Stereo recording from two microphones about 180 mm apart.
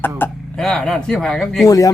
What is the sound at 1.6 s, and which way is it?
Speech, 20° left (ahead or behind).